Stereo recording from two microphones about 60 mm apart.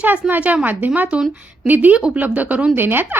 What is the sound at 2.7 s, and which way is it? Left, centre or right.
Speech, right.